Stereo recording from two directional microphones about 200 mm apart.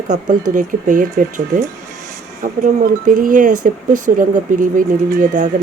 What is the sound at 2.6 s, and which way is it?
Speech, 40° right (ahead or behind).